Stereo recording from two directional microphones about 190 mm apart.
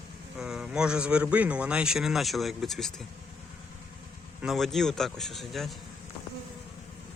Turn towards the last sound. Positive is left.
turn(degrees=0)  # may be behind; listen again after turning